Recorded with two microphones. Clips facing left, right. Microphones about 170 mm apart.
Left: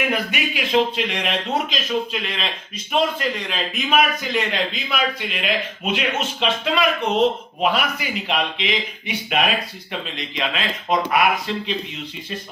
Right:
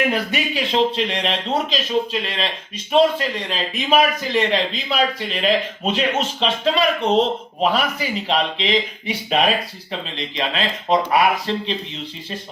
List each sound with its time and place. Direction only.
0.1 s speech: 35° right (ahead or behind)